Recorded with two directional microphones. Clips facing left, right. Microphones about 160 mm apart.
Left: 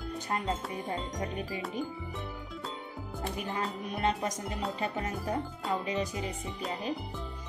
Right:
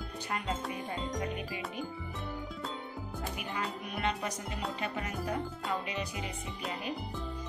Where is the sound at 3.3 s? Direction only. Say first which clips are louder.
Left 4 dB; 35° left (ahead or behind).